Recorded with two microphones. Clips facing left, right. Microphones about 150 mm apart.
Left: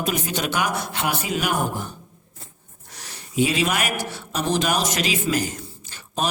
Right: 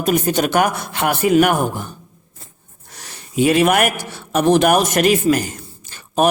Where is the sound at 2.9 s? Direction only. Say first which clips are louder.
Right 3 dB; 55° right (ahead or behind).